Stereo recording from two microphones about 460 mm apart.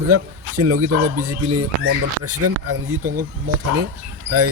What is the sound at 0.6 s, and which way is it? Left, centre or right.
Speech, right.